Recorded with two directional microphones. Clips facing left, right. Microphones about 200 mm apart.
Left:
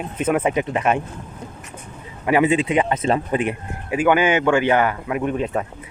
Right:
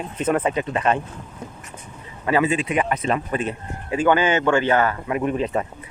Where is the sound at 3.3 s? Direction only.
15° left (ahead or behind).